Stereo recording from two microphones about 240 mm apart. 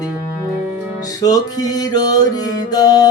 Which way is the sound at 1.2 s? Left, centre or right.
Centre.